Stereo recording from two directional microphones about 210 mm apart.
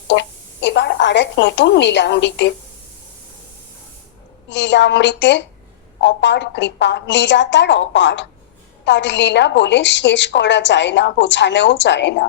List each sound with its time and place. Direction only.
0.1 s a woman's voice: 55° left (ahead or behind)
4.4 s a woman's voice: 60° left (ahead or behind)